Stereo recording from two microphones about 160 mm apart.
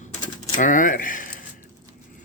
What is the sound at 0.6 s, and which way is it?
Speech, 55° left (ahead or behind).